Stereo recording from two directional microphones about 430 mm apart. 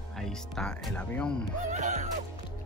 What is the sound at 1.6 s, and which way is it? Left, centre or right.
Speech, centre.